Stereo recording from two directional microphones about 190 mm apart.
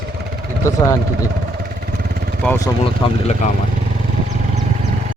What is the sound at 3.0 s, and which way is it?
Speech, 35° left (ahead or behind).